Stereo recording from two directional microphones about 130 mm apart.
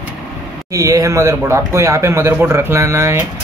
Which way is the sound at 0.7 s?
25° right (ahead or behind).